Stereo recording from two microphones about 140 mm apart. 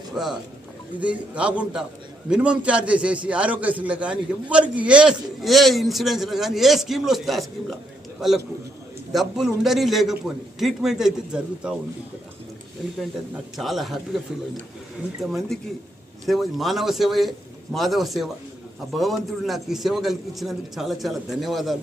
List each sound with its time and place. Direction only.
0.2 s a man's voice: 5° right (ahead or behind)
13.0 s a man's voice: centre (ahead or behind)
15.2 s a man's voice: centre (ahead or behind)